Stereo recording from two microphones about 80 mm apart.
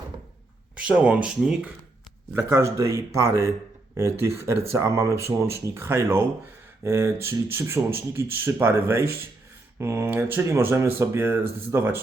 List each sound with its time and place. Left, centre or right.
0.8 s speech: centre
2.3 s speech: right